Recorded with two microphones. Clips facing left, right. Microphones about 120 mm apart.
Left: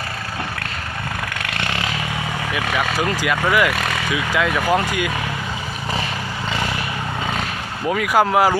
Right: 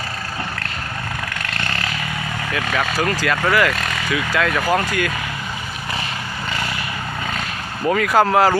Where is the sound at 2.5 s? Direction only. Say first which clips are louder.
Right 1 dB; 15° left (ahead or behind).